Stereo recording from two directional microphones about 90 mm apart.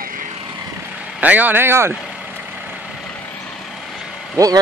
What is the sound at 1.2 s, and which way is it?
Speech, 20° right (ahead or behind).